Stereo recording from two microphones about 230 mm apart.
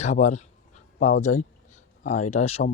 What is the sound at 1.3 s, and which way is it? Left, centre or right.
Speech, left.